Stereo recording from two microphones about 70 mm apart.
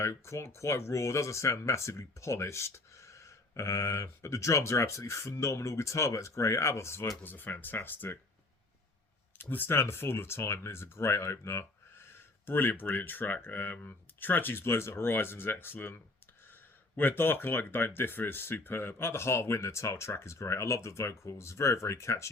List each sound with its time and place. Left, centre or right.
0.0 s speech: left
7.3 s speech: left
9.4 s speech: left
12.5 s speech: left